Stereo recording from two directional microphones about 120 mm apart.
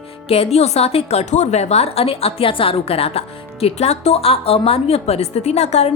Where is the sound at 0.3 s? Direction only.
60° left (ahead or behind).